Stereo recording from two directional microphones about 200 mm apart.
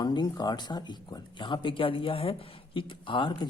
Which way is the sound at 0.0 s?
20° left (ahead or behind).